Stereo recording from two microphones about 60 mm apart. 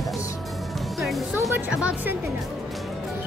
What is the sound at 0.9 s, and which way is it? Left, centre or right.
Speech, centre.